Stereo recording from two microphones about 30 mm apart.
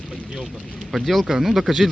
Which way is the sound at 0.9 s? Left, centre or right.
Centre.